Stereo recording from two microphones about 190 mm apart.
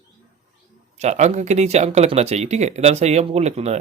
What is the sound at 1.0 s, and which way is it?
Speech, 35° right (ahead or behind).